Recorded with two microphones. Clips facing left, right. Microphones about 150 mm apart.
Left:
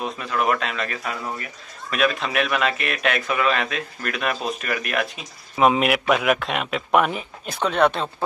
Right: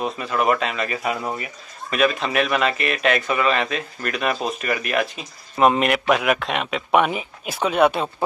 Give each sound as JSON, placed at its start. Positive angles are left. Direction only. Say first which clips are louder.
{"t": 0.0, "sound": "speech", "louder": "right 2 dB", "side_deg": 0}